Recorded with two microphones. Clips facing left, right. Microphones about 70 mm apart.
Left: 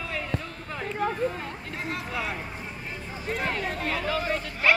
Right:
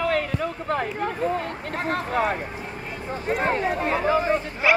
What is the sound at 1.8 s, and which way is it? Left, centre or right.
Speech, right.